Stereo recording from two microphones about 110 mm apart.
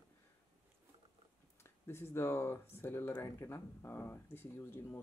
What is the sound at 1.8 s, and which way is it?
Speech, 20° left (ahead or behind).